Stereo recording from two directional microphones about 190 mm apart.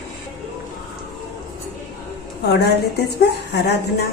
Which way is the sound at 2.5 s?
60° left (ahead or behind).